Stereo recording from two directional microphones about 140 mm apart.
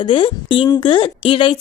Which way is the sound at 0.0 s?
35° left (ahead or behind).